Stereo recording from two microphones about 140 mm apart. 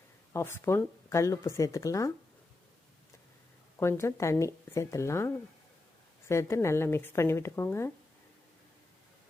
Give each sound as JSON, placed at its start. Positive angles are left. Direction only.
{"t": 0.3, "sound": "speech", "side_deg": 20}
{"t": 3.8, "sound": "speech", "side_deg": 20}